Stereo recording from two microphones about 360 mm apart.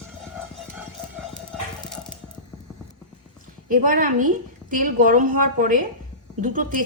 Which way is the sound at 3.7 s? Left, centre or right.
Right.